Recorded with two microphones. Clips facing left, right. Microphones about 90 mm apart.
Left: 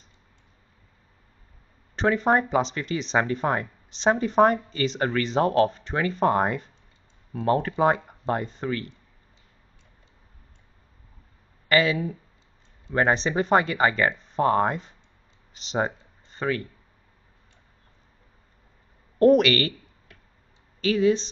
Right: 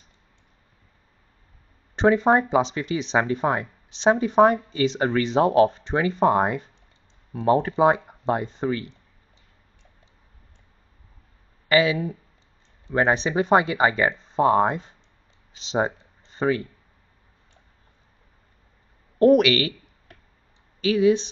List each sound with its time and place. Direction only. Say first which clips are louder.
2.0 s speech: right 3 dB; 20° right (ahead or behind)
8.5 s speech: right 4 dB; 20° right (ahead or behind)
11.7 s speech: right 2 dB; 10° right (ahead or behind)
14.1 s a sound: right 3 dB; 30° right (ahead or behind)
14.4 s speech: right 3 dB; 10° right (ahead or behind)
15.7 s a sound: right 2 dB; 20° right (ahead or behind)
19.1 s speech: right 1 dB; 5° right (ahead or behind)
20.8 s speech: right 2 dB; 10° right (ahead or behind)